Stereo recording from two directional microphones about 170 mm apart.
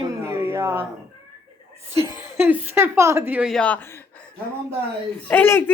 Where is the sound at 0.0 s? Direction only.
15° right (ahead or behind).